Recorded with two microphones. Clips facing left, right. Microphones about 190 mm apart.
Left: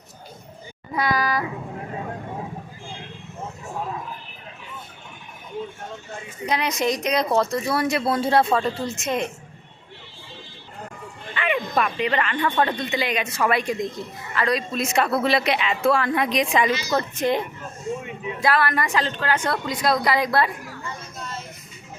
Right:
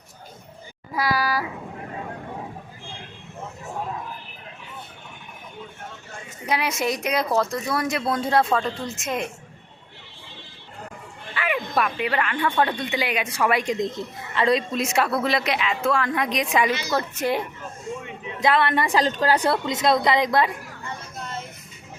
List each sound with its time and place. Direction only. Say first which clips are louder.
0.9 s speech: left 1 dB; 5° right (ahead or behind)
6.4 s speech: left 1 dB; 5° right (ahead or behind)
11.3 s speech: left 1 dB; 5° right (ahead or behind); by 14.8 s 25° right (ahead or behind)
14.8 s speech: left 1 dB; 10° right (ahead or behind)
18.3 s a woman's voice: right 1 dB; 20° right (ahead or behind)
19.6 s a woman's voice: right 2 dB; 25° right (ahead or behind)
21.2 s a sound: right 2 dB; 55° right (ahead or behind)